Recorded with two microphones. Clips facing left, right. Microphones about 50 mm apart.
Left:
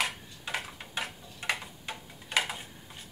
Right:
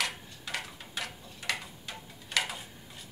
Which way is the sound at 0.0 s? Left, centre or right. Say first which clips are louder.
Left 2 dB; left.